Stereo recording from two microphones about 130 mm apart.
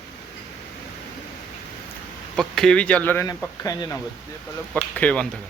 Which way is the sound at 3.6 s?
25° left (ahead or behind).